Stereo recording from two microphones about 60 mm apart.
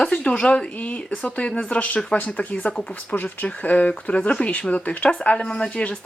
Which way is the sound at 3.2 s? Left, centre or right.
Left.